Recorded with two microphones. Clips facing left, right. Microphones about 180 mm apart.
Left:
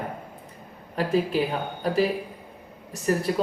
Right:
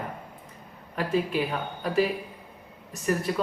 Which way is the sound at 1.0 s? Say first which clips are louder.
Left 3 dB; 35° left (ahead or behind).